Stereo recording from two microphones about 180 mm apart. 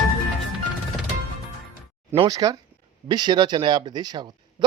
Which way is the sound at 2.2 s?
20° right (ahead or behind).